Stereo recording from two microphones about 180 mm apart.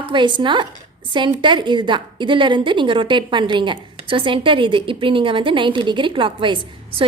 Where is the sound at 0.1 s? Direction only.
25° right (ahead or behind).